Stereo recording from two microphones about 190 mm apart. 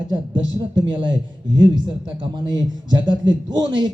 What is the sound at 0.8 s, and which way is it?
A man's voice, 25° right (ahead or behind).